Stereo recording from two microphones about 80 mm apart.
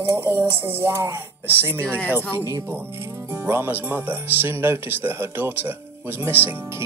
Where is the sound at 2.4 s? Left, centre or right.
Right.